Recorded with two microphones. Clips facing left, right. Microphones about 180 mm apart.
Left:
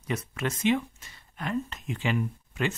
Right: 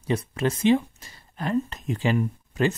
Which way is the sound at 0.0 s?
30° right (ahead or behind).